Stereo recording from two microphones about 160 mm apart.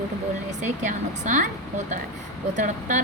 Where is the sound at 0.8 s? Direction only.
50° right (ahead or behind).